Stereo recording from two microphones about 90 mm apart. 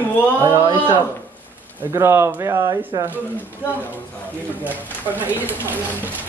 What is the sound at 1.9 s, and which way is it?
Speech, 30° right (ahead or behind).